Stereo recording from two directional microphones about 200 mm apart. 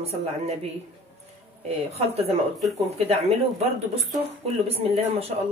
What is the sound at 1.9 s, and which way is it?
Speech, 30° right (ahead or behind).